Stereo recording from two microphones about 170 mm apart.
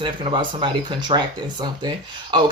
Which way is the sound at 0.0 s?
30° right (ahead or behind).